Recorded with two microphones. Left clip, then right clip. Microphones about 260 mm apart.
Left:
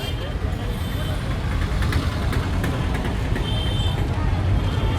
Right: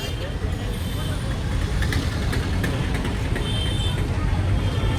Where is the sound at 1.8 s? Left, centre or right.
Left.